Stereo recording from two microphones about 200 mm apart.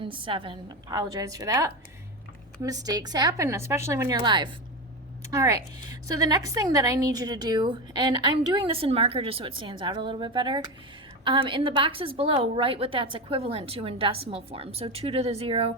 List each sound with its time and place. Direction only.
0.0 s a woman's voice: 25° right (ahead or behind)